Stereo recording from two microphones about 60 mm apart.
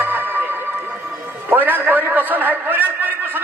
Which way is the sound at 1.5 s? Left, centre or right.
Right.